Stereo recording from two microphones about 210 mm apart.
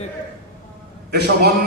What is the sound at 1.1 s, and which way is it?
Speech, 50° right (ahead or behind).